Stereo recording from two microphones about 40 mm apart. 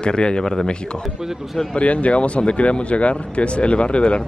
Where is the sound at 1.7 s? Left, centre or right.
Left.